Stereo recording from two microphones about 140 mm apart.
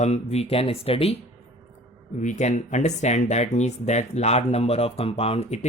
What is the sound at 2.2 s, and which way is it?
Speech, 60° left (ahead or behind).